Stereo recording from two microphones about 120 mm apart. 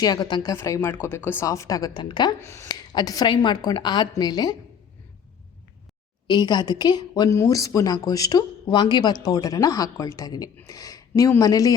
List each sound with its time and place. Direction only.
0.0 s a woman's voice: 35° left (ahead or behind)
0.5 s a woman's voice: 20° left (ahead or behind); by 2.3 s 40° left (ahead or behind)
2.4 s speech: 20° left (ahead or behind)
2.6 s a woman's voice: 35° left (ahead or behind)
6.2 s a woman's voice: 35° left (ahead or behind)
7.3 s a woman's voice: 25° left (ahead or behind)